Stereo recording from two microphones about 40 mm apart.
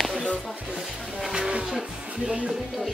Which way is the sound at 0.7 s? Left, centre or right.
Centre.